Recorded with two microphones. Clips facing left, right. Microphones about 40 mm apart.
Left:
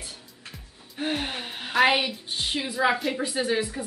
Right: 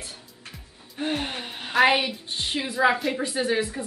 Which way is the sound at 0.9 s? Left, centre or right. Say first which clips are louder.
Right 1 dB; centre.